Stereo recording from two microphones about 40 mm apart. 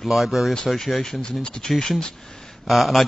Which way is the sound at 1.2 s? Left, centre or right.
Left.